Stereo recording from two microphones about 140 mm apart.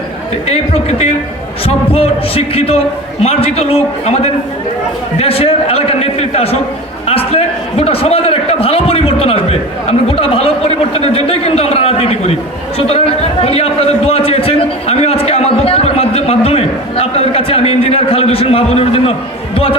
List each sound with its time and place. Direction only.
0.4 s a man's voice: 50° left (ahead or behind)
7.1 s a sound: 45° left (ahead or behind)
10.1 s a man's voice: 45° left (ahead or behind)